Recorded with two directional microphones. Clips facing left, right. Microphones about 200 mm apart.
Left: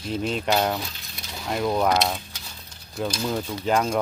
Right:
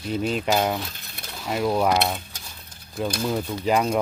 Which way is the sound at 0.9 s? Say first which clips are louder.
Right 1 dB; 55° right (ahead or behind).